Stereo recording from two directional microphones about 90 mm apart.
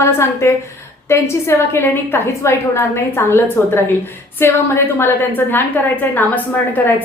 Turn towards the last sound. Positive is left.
turn(degrees=20)  # may be behind; listen again after turning